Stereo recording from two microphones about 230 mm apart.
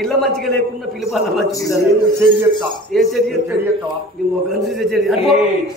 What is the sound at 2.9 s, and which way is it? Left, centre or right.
Speech, centre.